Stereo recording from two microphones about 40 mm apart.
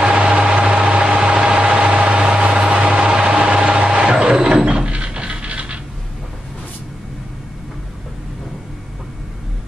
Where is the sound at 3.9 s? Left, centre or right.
Right.